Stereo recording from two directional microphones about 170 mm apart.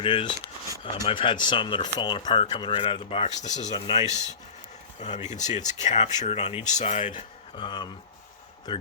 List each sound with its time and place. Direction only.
0.0 s speech: 30° left (ahead or behind)
3.6 s speech: 25° left (ahead or behind)
4.1 s speech: 20° right (ahead or behind)
4.9 s speech: 45° left (ahead or behind)
7.5 s speech: 25° left (ahead or behind)